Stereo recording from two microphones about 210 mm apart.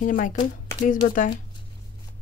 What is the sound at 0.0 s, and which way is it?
Speech, 40° left (ahead or behind).